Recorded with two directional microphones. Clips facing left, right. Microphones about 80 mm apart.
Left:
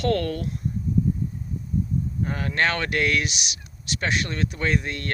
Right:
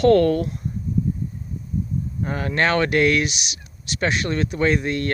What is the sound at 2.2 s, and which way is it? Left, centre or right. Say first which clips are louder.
Speech: right 4 dB; centre.